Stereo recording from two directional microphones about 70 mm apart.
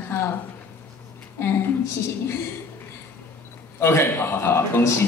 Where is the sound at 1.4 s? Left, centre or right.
Left.